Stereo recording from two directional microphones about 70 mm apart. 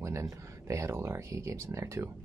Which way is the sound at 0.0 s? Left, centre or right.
Right.